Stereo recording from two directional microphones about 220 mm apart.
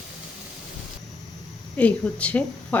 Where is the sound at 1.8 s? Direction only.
5° left (ahead or behind).